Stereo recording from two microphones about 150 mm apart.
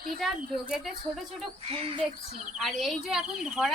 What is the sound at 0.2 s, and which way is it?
Speech, centre (ahead or behind).